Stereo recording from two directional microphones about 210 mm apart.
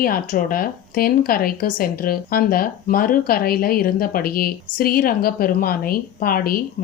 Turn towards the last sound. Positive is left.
turn(degrees=45)  # may be behind; listen again after turning